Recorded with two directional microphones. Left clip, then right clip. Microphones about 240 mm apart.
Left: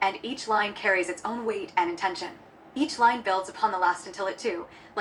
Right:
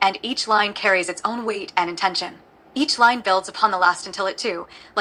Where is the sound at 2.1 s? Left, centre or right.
Centre.